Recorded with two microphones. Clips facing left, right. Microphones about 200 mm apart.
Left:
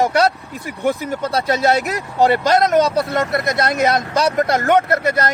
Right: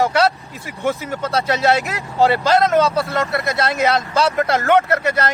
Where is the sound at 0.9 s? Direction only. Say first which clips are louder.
Left 2 dB; 15° left (ahead or behind).